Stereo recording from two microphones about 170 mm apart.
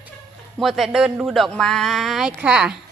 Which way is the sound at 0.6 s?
Centre (ahead or behind).